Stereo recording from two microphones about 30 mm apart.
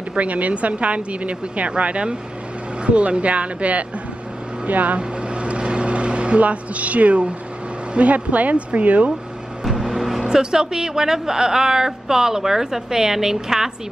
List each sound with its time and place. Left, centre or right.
0.1 s speech: right
4.6 s speech: right
4.9 s vehicle: right
6.4 s speech: right
9.8 s vehicle: centre
10.2 s a woman's voice: right